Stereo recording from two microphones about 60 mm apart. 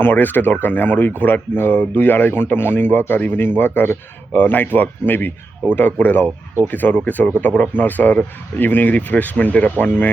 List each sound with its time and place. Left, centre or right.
0.0 s a man's voice: left